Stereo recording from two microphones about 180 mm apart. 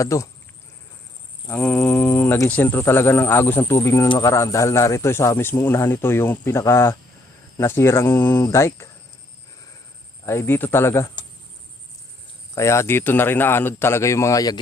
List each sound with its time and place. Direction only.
0.0 s a man's voice: 15° left (ahead or behind)
1.5 s a man's voice: 10° left (ahead or behind)
10.2 s a man's voice: 15° left (ahead or behind)
12.5 s a man's voice: 15° left (ahead or behind)